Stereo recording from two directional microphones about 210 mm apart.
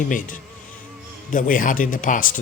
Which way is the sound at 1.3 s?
40° left (ahead or behind).